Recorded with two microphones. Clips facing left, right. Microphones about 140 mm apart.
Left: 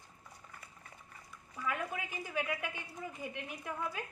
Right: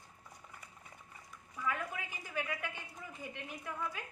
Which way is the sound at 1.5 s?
15° left (ahead or behind).